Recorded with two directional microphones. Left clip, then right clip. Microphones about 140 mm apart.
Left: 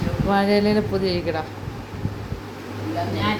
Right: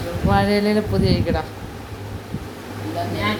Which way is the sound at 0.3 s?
5° left (ahead or behind).